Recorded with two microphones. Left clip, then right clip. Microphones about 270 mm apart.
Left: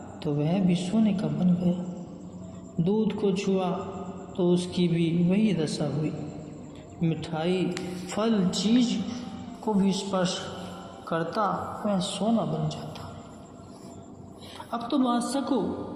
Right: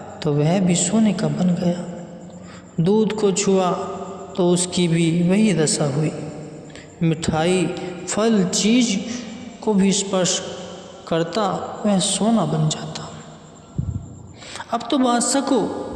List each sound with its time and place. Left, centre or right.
0.2 s a man's voice: right
2.8 s a man's voice: right
14.7 s a man's voice: right